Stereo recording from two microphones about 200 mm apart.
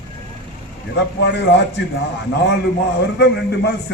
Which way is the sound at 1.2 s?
60° left (ahead or behind).